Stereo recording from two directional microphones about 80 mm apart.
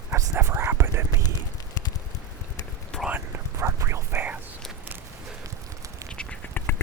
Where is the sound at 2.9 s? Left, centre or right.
Centre.